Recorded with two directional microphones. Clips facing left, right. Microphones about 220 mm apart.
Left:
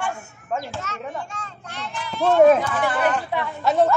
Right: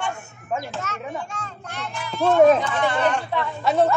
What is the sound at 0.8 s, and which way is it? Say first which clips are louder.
A child's voice: right 1 dB; 50° right (ahead or behind).